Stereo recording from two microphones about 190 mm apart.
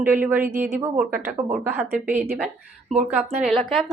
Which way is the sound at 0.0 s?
10° right (ahead or behind).